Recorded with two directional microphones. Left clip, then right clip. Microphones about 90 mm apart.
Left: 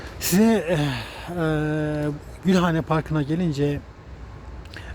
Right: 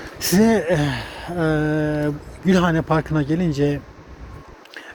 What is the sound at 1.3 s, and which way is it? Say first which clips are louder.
Mantra: right 4 dB; 45° left (ahead or behind).